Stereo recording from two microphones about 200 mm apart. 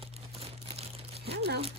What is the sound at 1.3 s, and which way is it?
Speech, 55° right (ahead or behind).